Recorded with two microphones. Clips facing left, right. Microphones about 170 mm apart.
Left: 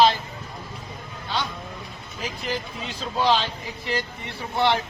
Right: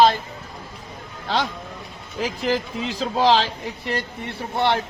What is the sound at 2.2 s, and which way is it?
A man's voice, 90° right.